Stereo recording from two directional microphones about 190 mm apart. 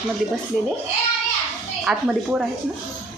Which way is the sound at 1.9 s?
Centre (ahead or behind).